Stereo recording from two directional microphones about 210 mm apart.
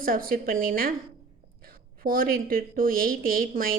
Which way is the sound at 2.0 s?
45° right (ahead or behind).